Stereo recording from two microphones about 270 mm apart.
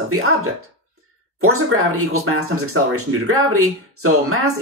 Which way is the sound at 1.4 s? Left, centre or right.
Right.